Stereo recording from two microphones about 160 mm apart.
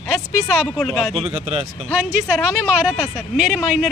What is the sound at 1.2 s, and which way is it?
Speech, 40° right (ahead or behind).